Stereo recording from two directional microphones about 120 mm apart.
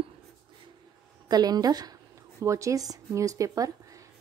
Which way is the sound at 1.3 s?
35° right (ahead or behind).